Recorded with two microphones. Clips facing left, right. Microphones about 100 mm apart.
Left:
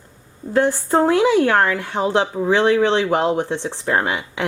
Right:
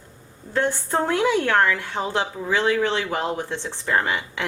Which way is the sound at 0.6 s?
15° left (ahead or behind).